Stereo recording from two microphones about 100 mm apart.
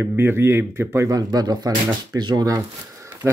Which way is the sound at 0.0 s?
20° right (ahead or behind).